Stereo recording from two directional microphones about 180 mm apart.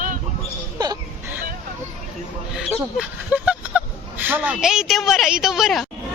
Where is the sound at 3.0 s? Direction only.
5° right (ahead or behind).